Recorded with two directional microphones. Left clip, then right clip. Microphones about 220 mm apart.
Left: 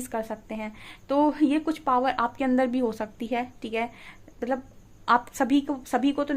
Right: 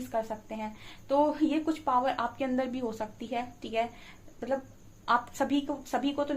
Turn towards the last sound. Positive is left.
turn(degrees=50)  # may be behind; listen again after turning